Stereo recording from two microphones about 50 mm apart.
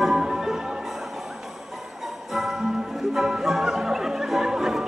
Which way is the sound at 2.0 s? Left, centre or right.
Centre.